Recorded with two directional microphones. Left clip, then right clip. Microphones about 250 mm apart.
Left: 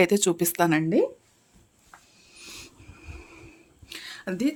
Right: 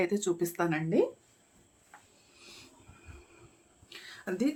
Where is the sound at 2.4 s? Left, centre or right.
Left.